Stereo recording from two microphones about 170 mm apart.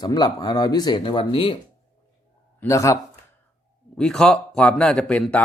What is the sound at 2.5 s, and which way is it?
Speech, 15° left (ahead or behind).